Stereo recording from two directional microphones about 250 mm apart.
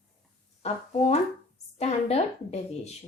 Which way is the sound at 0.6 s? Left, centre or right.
Left.